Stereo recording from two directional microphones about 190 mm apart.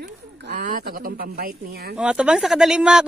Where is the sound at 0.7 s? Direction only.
45° right (ahead or behind).